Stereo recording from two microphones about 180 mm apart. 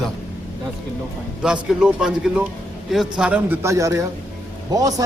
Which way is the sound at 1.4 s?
5° right (ahead or behind).